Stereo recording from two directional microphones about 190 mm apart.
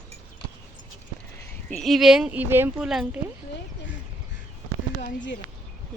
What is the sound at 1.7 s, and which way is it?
Speech, centre (ahead or behind).